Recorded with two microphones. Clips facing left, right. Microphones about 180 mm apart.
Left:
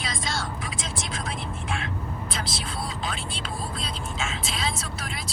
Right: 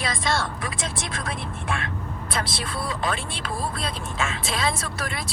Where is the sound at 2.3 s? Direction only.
55° right (ahead or behind).